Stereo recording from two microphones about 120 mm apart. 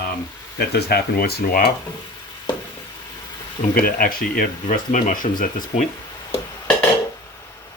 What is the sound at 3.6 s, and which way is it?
Speech, 90° left.